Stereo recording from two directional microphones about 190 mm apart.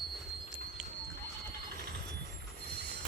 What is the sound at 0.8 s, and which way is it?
Horse, 5° right (ahead or behind).